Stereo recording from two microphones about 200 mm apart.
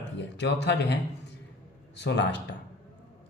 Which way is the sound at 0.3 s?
60° left (ahead or behind).